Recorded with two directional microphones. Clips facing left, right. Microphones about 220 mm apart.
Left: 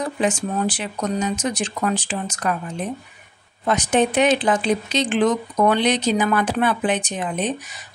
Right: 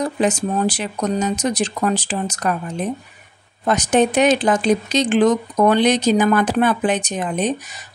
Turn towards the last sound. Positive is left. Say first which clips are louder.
# right 3 dB
turn(degrees=-40)  # may be behind; listen again after turning